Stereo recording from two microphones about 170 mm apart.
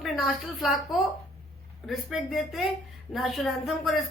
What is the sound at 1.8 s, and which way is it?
A woman's voice, centre (ahead or behind).